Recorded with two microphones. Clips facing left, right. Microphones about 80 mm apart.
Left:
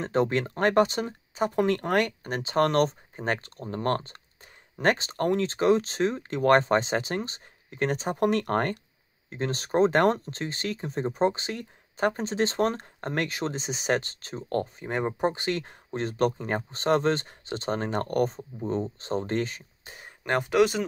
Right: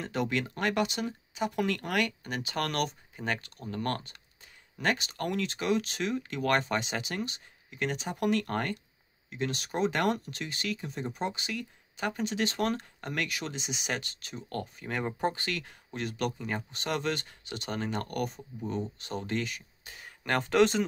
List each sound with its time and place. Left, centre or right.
0.0 s speech: left; by 20.8 s centre